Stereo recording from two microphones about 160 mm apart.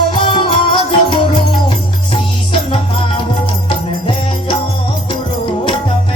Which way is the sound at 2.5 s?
35° left (ahead or behind).